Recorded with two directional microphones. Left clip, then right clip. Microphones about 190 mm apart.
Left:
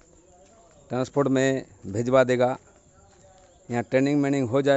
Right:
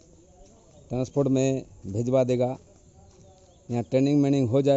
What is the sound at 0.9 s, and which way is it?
A man's voice, 15° left (ahead or behind).